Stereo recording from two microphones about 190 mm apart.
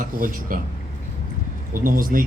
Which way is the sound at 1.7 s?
45° right (ahead or behind).